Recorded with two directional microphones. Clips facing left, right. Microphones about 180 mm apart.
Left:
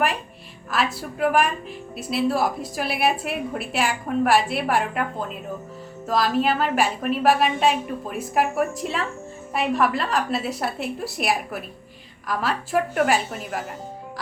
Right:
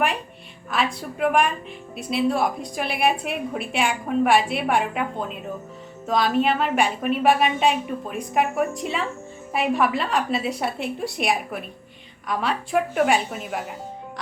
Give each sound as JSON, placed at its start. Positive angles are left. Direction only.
{"t": 0.7, "sound": "a woman's voice", "side_deg": 0}